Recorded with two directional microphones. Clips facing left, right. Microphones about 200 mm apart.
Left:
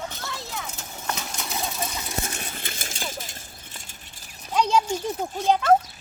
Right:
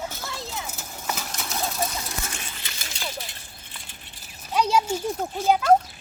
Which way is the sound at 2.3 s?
45° left (ahead or behind).